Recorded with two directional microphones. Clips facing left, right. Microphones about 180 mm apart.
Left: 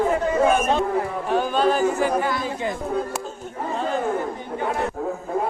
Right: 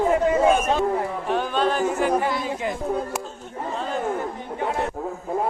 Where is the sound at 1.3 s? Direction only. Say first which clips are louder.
Left 3 dB; 5° left (ahead or behind).